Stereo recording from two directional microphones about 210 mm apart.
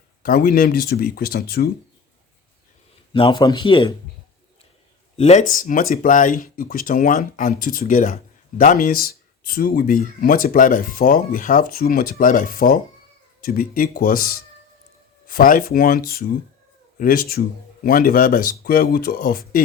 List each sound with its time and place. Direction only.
0.2 s speech: 45° left (ahead or behind)
3.1 s speech: 25° left (ahead or behind)
5.1 s speech: 30° left (ahead or behind)
15.3 s speech: 40° left (ahead or behind)